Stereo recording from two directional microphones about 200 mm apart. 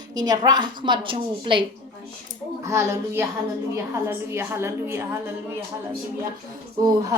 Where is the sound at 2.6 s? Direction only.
15° right (ahead or behind).